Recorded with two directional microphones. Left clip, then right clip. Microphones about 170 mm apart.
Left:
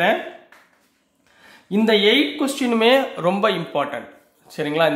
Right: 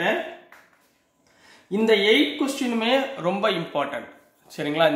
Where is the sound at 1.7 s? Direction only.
55° left (ahead or behind); by 4.9 s 25° left (ahead or behind).